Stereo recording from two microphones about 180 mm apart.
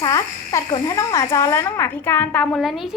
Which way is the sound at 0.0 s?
20° left (ahead or behind).